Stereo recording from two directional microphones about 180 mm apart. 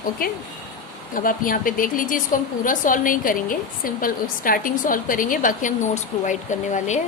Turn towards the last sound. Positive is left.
turn(degrees=40)  # may be behind; listen again after turning